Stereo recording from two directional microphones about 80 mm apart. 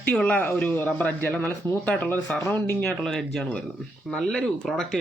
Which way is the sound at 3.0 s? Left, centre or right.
Centre.